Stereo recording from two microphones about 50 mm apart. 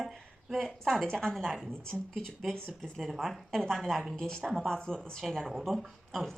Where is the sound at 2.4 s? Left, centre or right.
Centre.